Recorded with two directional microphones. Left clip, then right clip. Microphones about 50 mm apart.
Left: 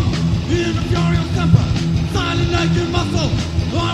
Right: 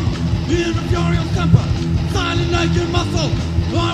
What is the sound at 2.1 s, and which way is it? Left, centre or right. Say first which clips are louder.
Vehicle: even; right.